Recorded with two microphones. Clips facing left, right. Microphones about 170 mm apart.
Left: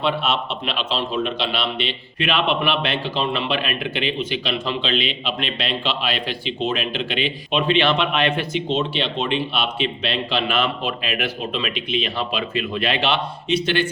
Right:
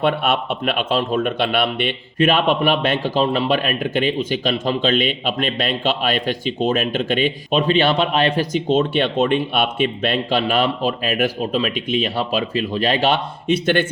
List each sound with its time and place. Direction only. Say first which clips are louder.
0.0 s a man's voice: right 3 dB; 55° right (ahead or behind)